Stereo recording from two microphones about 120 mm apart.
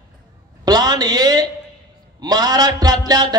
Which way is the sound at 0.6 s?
35° right (ahead or behind).